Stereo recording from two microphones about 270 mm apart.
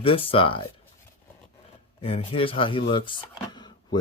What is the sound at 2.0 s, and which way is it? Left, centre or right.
Speech, left.